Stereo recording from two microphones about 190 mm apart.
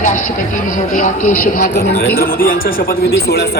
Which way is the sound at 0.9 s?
45° left (ahead or behind).